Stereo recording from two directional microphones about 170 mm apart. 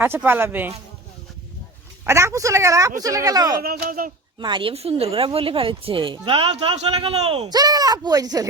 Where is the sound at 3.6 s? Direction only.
60° right (ahead or behind).